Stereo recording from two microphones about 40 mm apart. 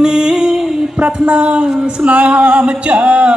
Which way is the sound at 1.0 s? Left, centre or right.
Right.